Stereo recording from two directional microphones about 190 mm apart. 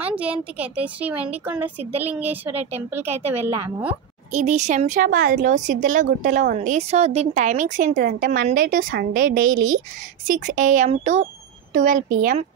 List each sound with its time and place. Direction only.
0.0 s speech: 5° right (ahead or behind)
4.3 s a woman's voice: 40° right (ahead or behind)